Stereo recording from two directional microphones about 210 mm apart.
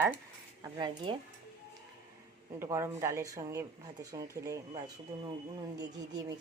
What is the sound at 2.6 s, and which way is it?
A woman's voice, 10° right (ahead or behind).